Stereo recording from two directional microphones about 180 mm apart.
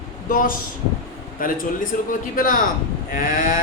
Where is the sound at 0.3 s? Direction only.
50° left (ahead or behind).